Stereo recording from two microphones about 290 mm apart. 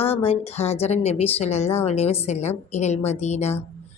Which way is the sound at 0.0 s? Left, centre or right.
Centre.